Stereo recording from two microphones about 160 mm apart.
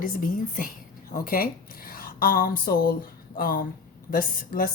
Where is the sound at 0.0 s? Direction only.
55° left (ahead or behind).